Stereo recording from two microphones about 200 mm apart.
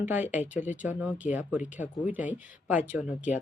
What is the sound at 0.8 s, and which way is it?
Speech, 10° right (ahead or behind).